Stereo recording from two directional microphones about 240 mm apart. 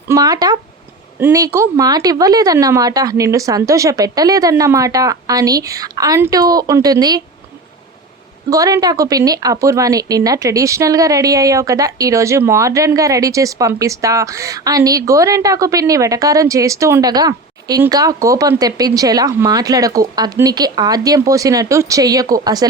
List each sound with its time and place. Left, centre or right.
0.1 s a woman's voice: centre
8.4 s a woman's voice: centre